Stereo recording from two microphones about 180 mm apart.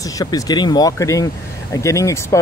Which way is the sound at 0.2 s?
20° left (ahead or behind).